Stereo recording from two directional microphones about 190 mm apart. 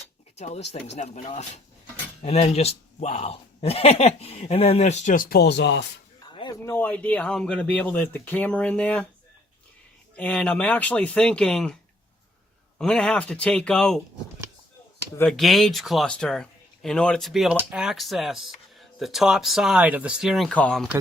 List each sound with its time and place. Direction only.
0.3 s a man's voice: 35° left (ahead or behind); by 5.8 s 65° left (ahead or behind)
6.2 s a sound: 25° left (ahead or behind)
6.7 s speech: 10° left (ahead or behind)
10.2 s speech: 5° left (ahead or behind)
12.8 s speech: 5° left (ahead or behind)
15.3 s speech: centre (ahead or behind)